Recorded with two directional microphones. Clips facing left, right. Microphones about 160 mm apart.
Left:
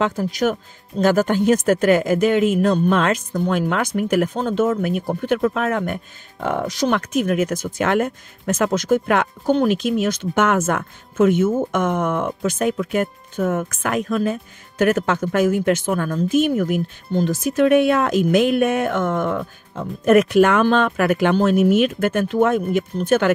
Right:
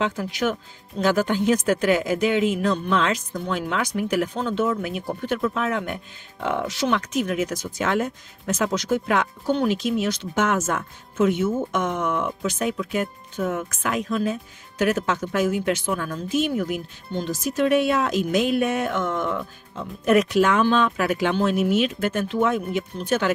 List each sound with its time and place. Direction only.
0.0 s speech: 40° left (ahead or behind)